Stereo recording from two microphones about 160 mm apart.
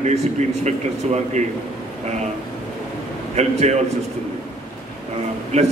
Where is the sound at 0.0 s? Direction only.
45° right (ahead or behind).